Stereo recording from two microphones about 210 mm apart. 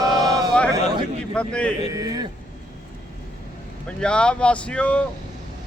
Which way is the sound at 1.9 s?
15° right (ahead or behind).